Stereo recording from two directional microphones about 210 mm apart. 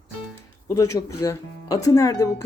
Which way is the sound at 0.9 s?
15° left (ahead or behind).